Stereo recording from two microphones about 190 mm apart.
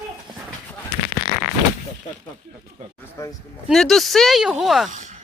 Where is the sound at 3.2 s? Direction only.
15° left (ahead or behind).